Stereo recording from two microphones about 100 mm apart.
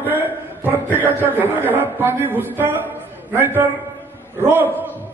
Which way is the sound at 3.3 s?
20° right (ahead or behind).